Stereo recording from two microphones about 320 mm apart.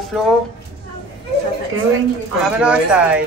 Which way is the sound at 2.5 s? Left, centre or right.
Centre.